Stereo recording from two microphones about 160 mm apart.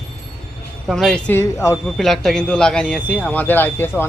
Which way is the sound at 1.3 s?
15° left (ahead or behind).